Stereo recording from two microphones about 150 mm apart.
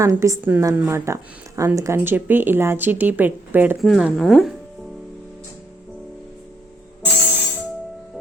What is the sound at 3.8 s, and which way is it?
Speech, centre (ahead or behind).